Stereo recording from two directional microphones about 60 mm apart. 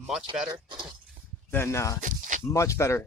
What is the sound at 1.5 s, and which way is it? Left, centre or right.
Speech, left.